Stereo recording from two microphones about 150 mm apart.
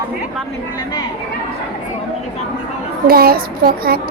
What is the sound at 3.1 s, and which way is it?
Child singing, 90° right.